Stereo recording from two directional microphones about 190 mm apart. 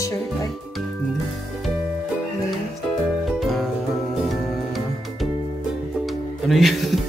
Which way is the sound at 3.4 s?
Centre (ahead or behind).